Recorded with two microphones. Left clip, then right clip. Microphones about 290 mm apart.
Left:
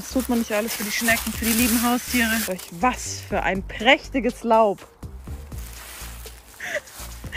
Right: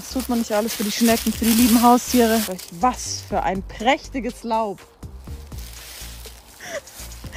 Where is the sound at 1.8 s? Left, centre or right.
Left.